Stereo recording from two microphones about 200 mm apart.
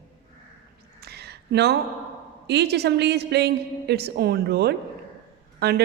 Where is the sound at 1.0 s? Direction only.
55° right (ahead or behind).